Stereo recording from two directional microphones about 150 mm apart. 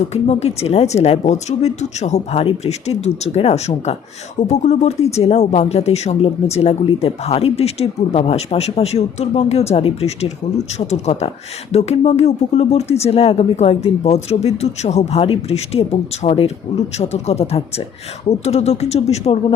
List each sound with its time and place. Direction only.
0.1 s speech: 45° left (ahead or behind)